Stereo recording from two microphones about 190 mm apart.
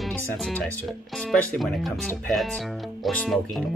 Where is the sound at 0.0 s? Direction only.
Centre (ahead or behind).